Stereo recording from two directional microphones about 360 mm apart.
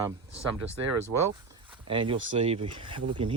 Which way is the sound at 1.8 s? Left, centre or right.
Centre.